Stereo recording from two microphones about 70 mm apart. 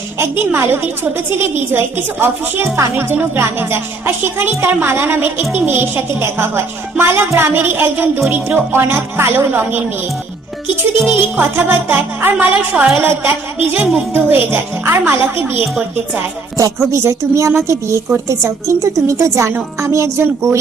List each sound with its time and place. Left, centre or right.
0.2 s a woman's voice: right
7.3 s a woman's voice: right
7.5 s a woman's voice: right
11.1 s speech: right
13.7 s music: centre
14.1 s a woman's voice: right
16.6 s a woman's voice: right